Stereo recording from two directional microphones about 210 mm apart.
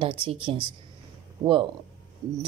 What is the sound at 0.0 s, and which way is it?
Speech, 25° right (ahead or behind).